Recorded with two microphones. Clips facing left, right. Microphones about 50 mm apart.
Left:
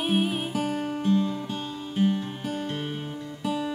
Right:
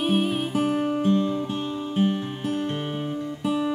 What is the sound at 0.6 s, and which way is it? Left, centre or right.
Music, centre.